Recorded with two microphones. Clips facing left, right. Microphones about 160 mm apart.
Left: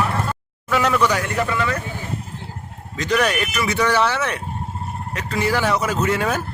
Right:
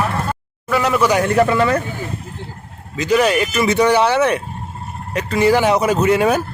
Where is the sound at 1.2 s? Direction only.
40° right (ahead or behind).